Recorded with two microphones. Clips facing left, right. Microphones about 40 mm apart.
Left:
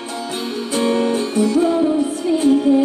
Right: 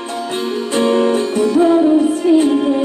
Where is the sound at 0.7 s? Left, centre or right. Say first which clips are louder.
Right 4 dB; right.